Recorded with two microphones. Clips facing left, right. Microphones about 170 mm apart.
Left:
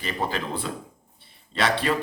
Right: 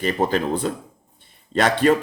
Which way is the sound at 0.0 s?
45° right (ahead or behind).